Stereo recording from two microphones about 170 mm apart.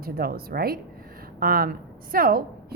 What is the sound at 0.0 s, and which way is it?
A woman's voice, 60° right (ahead or behind).